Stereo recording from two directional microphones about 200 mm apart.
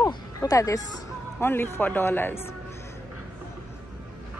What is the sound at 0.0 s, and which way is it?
Music, 15° left (ahead or behind).